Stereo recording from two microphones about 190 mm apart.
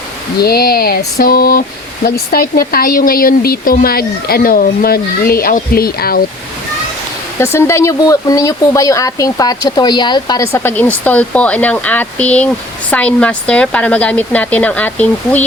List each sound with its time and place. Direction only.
0.3 s speech: 55° left (ahead or behind)
7.3 s speech: 15° left (ahead or behind)